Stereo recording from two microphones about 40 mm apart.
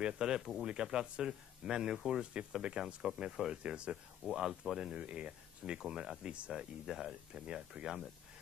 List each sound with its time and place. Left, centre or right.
0.0 s speech: centre
0.4 s speech: centre
0.7 s speech: centre
4.3 s speech: centre
4.9 s speech: right